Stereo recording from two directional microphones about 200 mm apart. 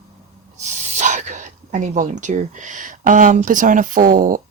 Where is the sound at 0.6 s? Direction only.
35° right (ahead or behind).